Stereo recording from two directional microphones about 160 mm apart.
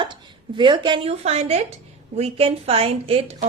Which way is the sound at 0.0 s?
30° right (ahead or behind).